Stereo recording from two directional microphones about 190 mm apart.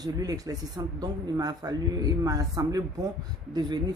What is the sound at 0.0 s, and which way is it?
Speech, 20° right (ahead or behind).